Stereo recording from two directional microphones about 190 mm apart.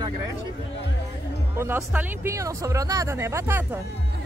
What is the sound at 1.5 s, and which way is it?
Speech, 10° right (ahead or behind).